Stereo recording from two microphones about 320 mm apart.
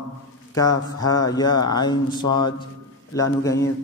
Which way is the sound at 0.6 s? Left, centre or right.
Centre.